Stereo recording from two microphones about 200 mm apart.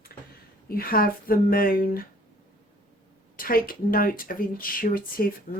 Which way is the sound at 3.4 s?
45° left (ahead or behind).